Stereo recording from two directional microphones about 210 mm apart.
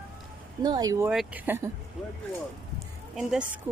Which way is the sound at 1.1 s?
5° right (ahead or behind).